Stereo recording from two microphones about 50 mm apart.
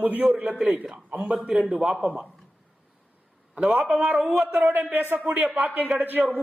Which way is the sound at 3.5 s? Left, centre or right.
Right.